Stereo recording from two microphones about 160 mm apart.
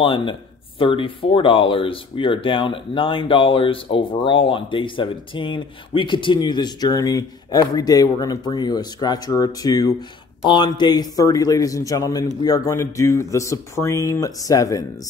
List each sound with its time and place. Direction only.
0.0 s speech: 30° left (ahead or behind)